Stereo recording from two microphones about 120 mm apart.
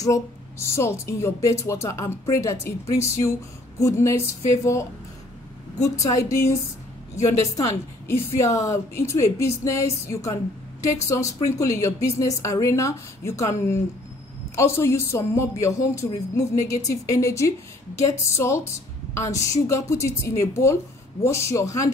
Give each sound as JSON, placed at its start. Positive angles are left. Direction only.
{"t": 0.0, "sound": "speech", "side_deg": 25}